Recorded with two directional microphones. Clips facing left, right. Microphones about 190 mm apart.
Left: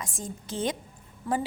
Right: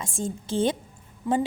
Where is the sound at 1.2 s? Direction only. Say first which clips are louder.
Right 4 dB; 15° right (ahead or behind).